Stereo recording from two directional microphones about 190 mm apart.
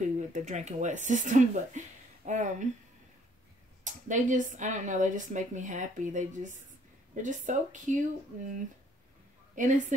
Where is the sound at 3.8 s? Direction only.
40° right (ahead or behind).